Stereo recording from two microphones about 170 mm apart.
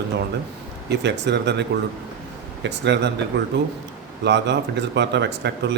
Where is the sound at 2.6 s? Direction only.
90° right.